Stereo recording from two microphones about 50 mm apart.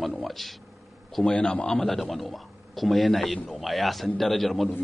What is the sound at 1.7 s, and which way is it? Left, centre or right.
Speech, centre.